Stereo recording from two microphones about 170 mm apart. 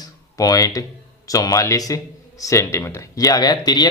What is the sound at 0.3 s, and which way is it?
A man's voice, 20° left (ahead or behind).